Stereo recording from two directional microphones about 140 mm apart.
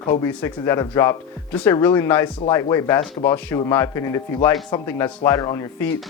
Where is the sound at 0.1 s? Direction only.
20° left (ahead or behind).